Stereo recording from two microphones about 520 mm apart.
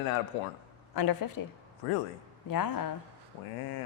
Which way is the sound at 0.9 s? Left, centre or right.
Left.